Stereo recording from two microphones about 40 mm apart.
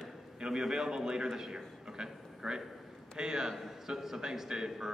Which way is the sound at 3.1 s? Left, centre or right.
Centre.